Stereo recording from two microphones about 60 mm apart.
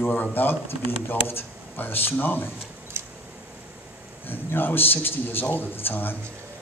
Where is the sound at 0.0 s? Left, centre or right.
Left.